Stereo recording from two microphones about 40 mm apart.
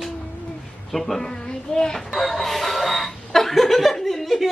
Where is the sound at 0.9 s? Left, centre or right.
Centre.